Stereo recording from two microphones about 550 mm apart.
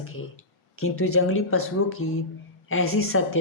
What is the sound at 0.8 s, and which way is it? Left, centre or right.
A woman's voice, left.